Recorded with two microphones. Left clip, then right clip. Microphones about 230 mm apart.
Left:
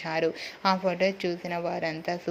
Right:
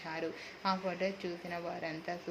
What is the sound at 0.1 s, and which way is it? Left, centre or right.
Speech, left.